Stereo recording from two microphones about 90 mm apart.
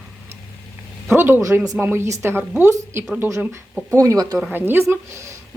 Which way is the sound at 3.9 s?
35° right (ahead or behind).